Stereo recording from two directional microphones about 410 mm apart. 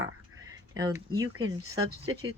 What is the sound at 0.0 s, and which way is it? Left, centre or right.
Bleat, centre.